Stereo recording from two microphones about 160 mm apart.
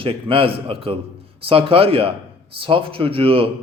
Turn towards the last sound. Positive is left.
turn(degrees=-35)  # may be behind; listen again after turning